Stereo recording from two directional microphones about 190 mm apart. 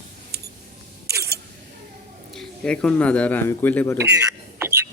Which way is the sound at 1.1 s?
55° right (ahead or behind).